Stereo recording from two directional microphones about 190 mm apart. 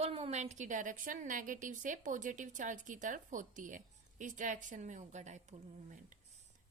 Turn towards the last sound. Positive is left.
turn(degrees=-40)  # may be behind; listen again after turning